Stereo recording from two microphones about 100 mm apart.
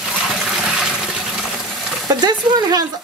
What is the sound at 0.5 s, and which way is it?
Toilet flush, 5° right (ahead or behind).